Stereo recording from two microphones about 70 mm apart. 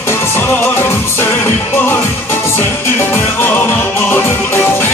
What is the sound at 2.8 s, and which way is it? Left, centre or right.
Music, left.